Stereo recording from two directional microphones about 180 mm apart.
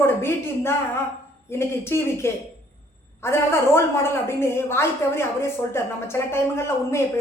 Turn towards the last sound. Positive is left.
turn(degrees=15)  # may be behind; listen again after turning